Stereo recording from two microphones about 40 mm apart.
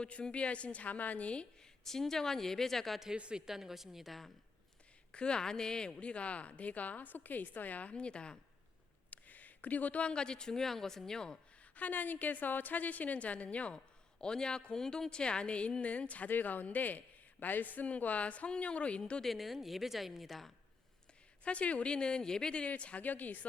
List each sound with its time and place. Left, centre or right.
0.0 s speech: left
1.8 s a woman's voice: centre
3.2 s speech: right
3.4 s a woman's voice: centre
5.1 s speech: left
7.9 s a woman's voice: left
9.0 s a sound: left
10.0 s a woman's voice: left
11.8 s a woman's voice: left
13.7 s a man's voice: left
16.3 s a woman's voice: left
19.2 s speech: centre
21.4 s a woman's voice: left
22.6 s speech: left